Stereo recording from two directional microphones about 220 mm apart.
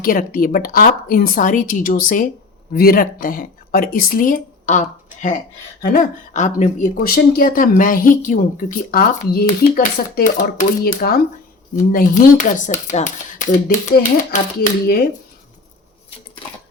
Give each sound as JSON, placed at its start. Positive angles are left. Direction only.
{"t": 0.0, "sound": "speech", "side_deg": 40}
{"t": 16.4, "sound": "sewing machine", "side_deg": 25}